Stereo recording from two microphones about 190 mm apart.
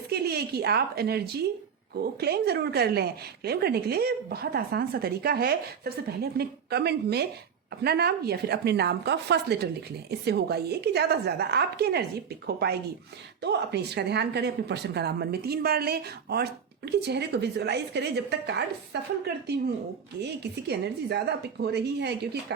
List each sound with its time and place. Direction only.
0.1 s a woman's voice: 55° right (ahead or behind)
20.2 s a woman's voice: 60° right (ahead or behind)